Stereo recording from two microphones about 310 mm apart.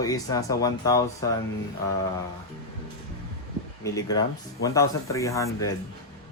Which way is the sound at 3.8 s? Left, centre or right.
Centre.